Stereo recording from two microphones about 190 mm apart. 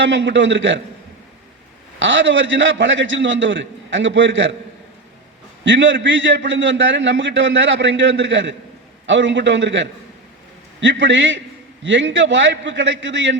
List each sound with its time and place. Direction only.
0.0 s a man's voice: 70° right (ahead or behind)
2.0 s a man's voice: 75° right (ahead or behind)
5.6 s a man's voice: 75° right (ahead or behind)